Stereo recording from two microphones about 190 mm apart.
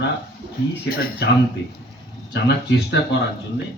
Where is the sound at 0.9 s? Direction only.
50° left (ahead or behind).